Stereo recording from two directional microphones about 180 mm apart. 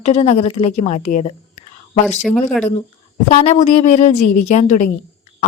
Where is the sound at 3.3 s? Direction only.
35° left (ahead or behind).